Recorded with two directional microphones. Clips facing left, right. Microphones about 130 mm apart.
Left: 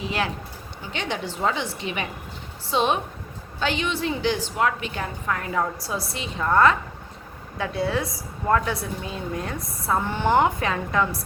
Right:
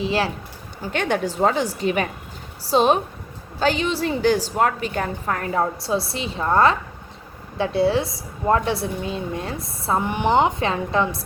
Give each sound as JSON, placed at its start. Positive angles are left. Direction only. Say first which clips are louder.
{"t": 0.0, "sound": "a woman's voice", "louder": "right 5 dB", "side_deg": -30}
{"t": 0.8, "sound": "a woman's voice", "louder": "right 7 dB", "side_deg": -50}
{"t": 5.5, "sound": "a woman's voice", "louder": "right 7 dB", "side_deg": -30}
{"t": 10.0, "sound": "a woman's voice", "louder": "right 2 dB", "side_deg": -15}